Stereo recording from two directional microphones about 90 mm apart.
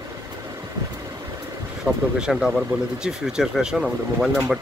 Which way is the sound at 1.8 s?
5° right (ahead or behind).